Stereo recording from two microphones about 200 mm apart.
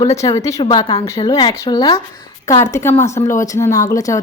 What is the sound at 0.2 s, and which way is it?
A woman's voice, 15° left (ahead or behind).